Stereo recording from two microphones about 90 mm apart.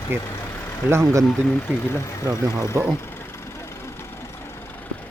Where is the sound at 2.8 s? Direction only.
35° right (ahead or behind).